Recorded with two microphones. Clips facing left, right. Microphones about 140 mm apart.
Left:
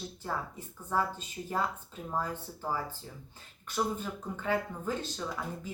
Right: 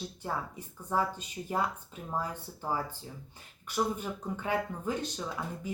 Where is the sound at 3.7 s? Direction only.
15° right (ahead or behind).